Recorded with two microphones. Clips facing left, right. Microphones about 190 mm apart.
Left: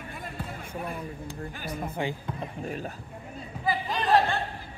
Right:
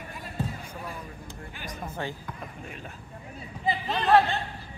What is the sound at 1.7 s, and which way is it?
Speech, 15° left (ahead or behind).